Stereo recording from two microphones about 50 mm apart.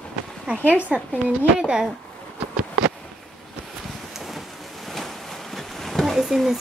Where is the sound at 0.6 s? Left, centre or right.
Right.